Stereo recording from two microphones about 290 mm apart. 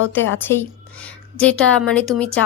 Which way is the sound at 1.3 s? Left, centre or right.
Centre.